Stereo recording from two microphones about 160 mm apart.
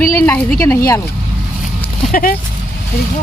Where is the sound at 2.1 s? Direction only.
65° left (ahead or behind).